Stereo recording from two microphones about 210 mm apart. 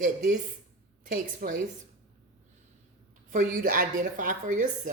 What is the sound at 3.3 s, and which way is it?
A woman's voice, 45° right (ahead or behind).